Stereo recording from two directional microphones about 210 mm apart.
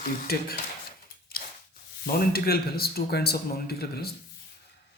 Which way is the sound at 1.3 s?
45° left (ahead or behind).